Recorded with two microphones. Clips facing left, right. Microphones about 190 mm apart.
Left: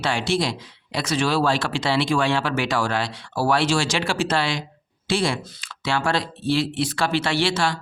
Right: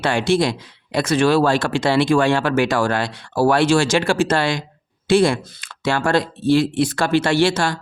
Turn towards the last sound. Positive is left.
turn(degrees=-45)  # may be behind; listen again after turning